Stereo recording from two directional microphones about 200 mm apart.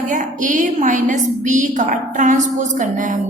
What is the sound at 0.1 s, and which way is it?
A woman's voice, 40° right (ahead or behind).